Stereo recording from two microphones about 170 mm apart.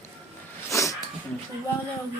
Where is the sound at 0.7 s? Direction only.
20° left (ahead or behind).